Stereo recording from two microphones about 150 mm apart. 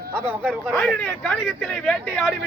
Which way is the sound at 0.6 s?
5° left (ahead or behind).